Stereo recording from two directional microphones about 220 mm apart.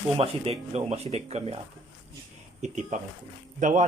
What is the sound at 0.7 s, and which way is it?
A man's voice, 30° right (ahead or behind).